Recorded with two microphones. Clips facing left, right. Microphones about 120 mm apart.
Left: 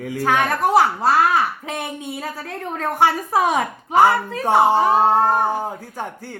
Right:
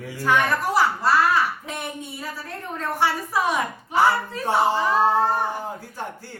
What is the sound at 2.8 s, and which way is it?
Speech, 55° left (ahead or behind).